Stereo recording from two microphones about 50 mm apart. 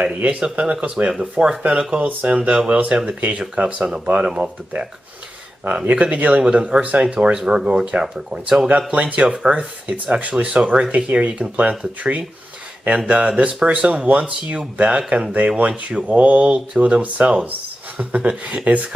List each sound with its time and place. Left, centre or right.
0.4 s speech: right
1.7 s speech: centre
6.4 s speech: centre
8.9 s speech: right
9.3 s speech: centre